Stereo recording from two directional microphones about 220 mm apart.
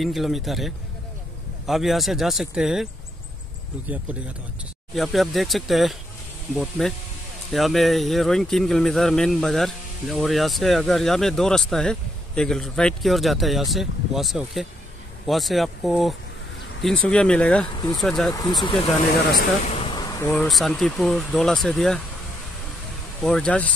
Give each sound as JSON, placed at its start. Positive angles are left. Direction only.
{"t": 0.0, "sound": "speech", "side_deg": 0}
{"t": 4.9, "sound": "speech", "side_deg": 0}
{"t": 18.3, "sound": "speech", "side_deg": 15}
{"t": 19.3, "sound": "vehicle", "side_deg": 30}
{"t": 20.2, "sound": "speech", "side_deg": 0}
{"t": 23.2, "sound": "speech", "side_deg": 5}